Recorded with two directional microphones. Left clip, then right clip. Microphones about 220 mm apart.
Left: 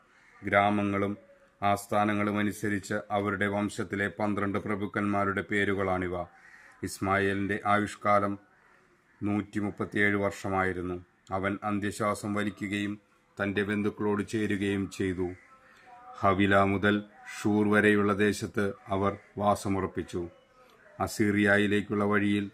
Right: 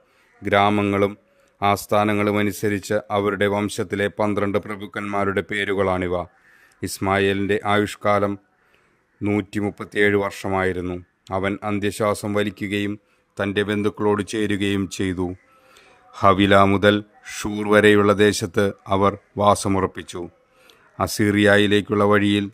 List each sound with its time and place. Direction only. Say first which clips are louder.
0.4 s speech: right 7 dB; 50° right (ahead or behind)